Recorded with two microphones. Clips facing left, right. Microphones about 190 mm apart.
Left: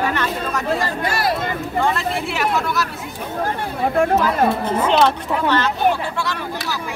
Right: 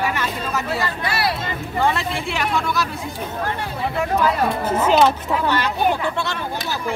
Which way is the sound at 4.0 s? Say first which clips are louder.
Left 7 dB; 55° left (ahead or behind).